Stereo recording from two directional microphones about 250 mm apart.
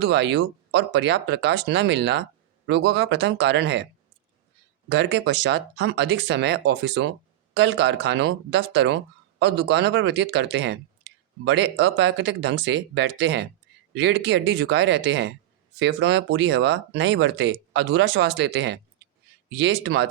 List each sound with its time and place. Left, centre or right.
0.0 s speech: right
4.9 s speech: right